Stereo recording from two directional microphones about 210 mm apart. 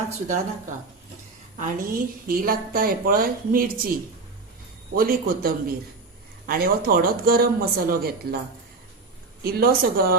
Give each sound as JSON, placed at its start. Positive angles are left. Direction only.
{"t": 1.5, "sound": "a woman's voice", "side_deg": -40}
{"t": 4.9, "sound": "a woman's voice", "side_deg": -45}
{"t": 9.4, "sound": "a woman's voice", "side_deg": -45}